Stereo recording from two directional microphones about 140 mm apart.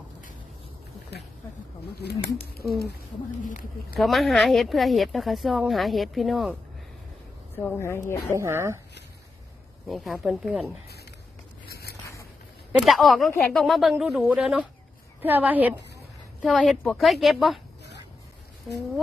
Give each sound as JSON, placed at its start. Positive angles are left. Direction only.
{"t": 2.6, "sound": "speech", "side_deg": -5}
{"t": 3.4, "sound": "speech", "side_deg": 65}
{"t": 3.9, "sound": "speech", "side_deg": 0}
{"t": 7.6, "sound": "a woman's voice", "side_deg": 15}
{"t": 8.3, "sound": "speech", "side_deg": -20}
{"t": 9.9, "sound": "speech", "side_deg": 0}
{"t": 12.8, "sound": "a woman's voice", "side_deg": 0}
{"t": 16.4, "sound": "speech", "side_deg": 5}
{"t": 18.7, "sound": "speech", "side_deg": 0}